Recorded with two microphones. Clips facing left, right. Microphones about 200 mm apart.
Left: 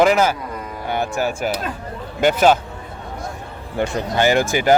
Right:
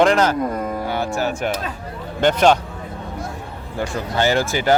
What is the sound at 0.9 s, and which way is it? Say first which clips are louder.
Music: left 4 dB; 15° left (ahead or behind).